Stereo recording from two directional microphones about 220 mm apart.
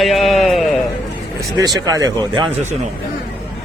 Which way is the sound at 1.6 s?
15° right (ahead or behind).